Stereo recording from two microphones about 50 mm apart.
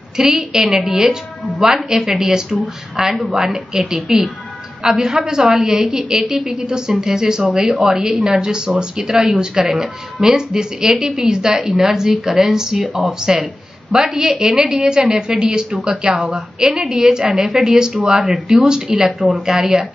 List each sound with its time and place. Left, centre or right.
0.4 s a woman's voice: centre
0.7 s a woman's voice: centre